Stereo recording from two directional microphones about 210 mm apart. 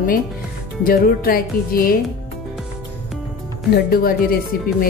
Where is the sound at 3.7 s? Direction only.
45° left (ahead or behind).